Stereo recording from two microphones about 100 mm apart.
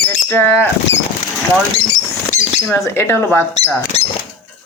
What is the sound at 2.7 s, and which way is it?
Speech, 25° left (ahead or behind).